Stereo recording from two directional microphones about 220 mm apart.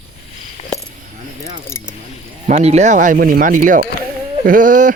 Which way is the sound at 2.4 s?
30° right (ahead or behind).